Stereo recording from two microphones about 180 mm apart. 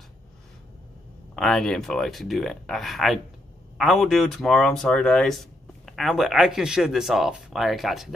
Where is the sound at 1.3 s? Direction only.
5° left (ahead or behind).